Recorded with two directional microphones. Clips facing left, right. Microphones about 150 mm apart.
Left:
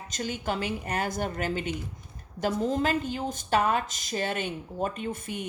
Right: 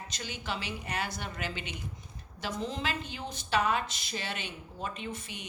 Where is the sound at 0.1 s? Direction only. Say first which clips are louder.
Left 8 dB; 45° left (ahead or behind).